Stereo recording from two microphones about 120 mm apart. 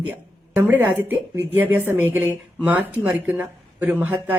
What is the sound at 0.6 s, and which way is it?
Speech, 15° right (ahead or behind).